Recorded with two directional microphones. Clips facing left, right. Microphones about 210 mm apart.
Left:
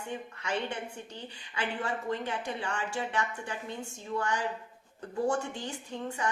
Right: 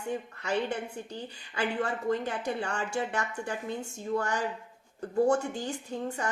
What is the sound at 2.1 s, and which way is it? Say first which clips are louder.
A woman's voice: right 4 dB; 40° right (ahead or behind).